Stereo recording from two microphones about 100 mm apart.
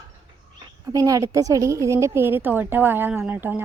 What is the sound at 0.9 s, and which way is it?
A woman's voice, 35° right (ahead or behind).